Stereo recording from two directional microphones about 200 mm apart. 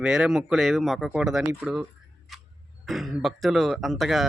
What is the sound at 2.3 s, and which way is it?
Clock, centre (ahead or behind).